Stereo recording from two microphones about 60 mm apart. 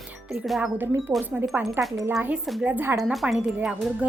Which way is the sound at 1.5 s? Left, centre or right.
Right.